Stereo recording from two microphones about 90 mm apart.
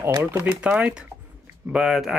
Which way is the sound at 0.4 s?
15° right (ahead or behind).